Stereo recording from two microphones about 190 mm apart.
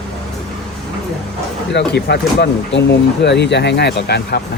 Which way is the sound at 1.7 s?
65° left (ahead or behind).